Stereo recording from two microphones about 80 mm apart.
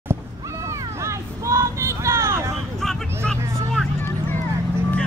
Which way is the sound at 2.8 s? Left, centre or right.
Centre.